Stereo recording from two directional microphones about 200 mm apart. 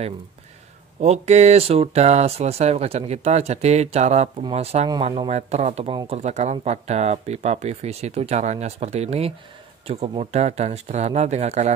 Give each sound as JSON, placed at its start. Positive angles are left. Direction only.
{"t": 1.0, "sound": "speech", "side_deg": -35}